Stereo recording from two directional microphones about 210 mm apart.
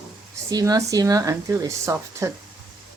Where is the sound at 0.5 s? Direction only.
15° right (ahead or behind).